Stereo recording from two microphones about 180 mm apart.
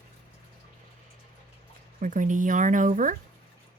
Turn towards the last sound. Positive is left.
turn(degrees=-45)  # may be behind; listen again after turning